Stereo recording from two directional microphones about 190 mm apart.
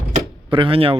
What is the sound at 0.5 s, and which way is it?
Speech, 25° right (ahead or behind).